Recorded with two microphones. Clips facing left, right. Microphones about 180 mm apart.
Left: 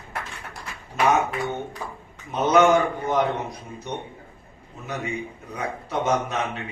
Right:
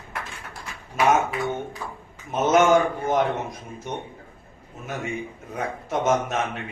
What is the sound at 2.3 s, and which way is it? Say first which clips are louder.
A man's voice: even; 45° right (ahead or behind).